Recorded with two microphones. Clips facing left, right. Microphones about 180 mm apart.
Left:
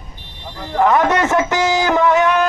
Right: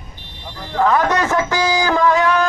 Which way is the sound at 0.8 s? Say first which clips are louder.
Left 2 dB; 25° left (ahead or behind).